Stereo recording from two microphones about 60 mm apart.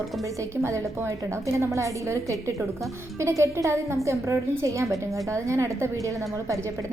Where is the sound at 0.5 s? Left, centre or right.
Right.